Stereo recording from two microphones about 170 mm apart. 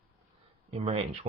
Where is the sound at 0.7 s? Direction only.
35° right (ahead or behind).